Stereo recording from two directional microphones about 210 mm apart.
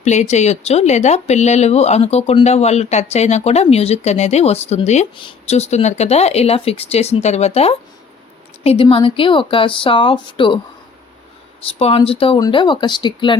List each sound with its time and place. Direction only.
0.0 s a woman's voice: 35° left (ahead or behind)
11.8 s a woman's voice: 30° left (ahead or behind)